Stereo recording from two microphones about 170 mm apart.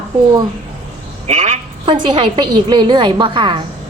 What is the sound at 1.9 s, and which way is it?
A woman's voice, 25° right (ahead or behind).